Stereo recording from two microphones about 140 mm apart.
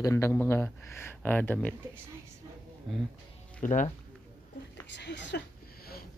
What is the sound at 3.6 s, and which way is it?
Speech, 70° left (ahead or behind).